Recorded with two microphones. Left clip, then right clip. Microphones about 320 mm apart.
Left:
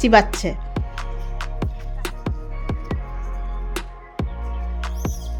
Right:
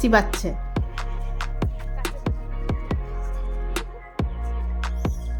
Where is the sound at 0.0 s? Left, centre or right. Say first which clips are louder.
Left 5 dB; centre.